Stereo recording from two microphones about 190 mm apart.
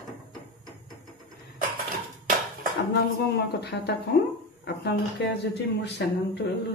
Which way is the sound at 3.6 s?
60° left (ahead or behind).